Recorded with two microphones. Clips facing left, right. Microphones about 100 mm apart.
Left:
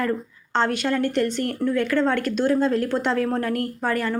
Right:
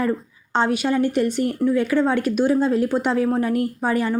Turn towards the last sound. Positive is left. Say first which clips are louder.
# right 3 dB
turn(degrees=-15)  # may be behind; listen again after turning